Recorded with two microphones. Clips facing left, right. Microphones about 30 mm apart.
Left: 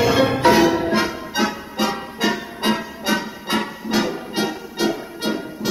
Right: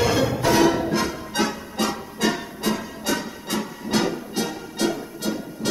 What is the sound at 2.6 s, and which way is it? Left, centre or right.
Music, left.